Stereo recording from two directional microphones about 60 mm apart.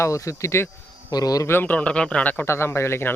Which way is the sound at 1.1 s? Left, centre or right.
Left.